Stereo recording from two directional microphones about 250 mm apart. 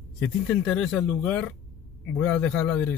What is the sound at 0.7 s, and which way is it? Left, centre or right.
Speech, centre.